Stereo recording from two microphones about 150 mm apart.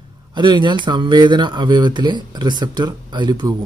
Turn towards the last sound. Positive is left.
turn(degrees=-30)  # may be behind; listen again after turning